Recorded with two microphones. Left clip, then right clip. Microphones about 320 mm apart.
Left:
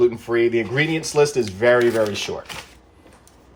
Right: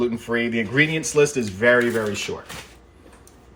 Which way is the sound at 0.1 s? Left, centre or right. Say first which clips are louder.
Left 4 dB; left.